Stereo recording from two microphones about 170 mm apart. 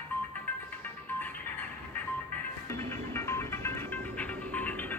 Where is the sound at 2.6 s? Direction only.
15° left (ahead or behind).